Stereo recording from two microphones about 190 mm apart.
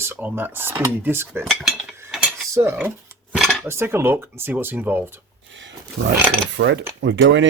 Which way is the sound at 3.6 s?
15° right (ahead or behind).